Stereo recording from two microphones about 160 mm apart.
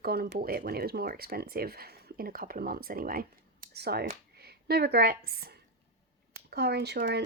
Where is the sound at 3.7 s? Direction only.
85° right.